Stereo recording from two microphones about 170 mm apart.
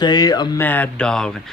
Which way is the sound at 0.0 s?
25° left (ahead or behind).